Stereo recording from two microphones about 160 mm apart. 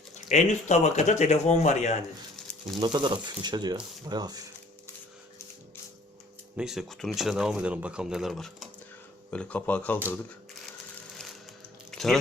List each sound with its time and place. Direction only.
0.3 s speech: 45° left (ahead or behind)
2.7 s speech: 30° right (ahead or behind)
6.6 s speech: 5° right (ahead or behind)
11.9 s a sound: centre (ahead or behind)